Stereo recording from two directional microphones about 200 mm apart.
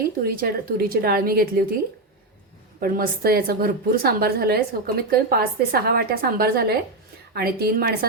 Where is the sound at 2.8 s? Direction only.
45° right (ahead or behind).